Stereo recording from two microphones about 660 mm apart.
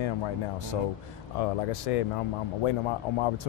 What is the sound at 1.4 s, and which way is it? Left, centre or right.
Speech, left.